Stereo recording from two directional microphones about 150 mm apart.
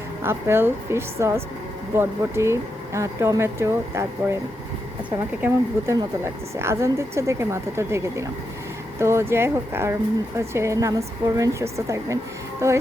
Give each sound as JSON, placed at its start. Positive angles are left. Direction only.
{"t": 0.2, "sound": "a woman's voice", "side_deg": -15}
{"t": 5.4, "sound": "a woman's voice", "side_deg": -15}